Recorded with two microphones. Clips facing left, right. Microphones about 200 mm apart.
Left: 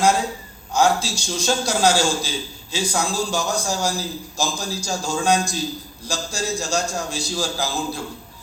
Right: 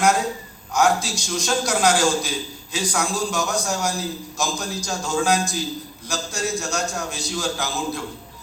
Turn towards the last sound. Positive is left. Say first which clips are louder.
# left 1 dB
turn(degrees=30)  # may be behind; listen again after turning